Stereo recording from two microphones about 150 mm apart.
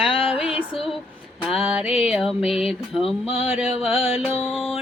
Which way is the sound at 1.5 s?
5° right (ahead or behind).